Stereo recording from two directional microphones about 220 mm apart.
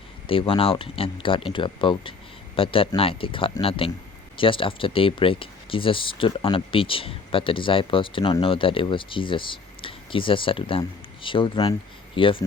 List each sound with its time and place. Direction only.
0.3 s speech: 25° left (ahead or behind)